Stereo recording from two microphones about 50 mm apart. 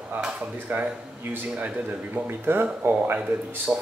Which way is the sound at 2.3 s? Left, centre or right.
Right.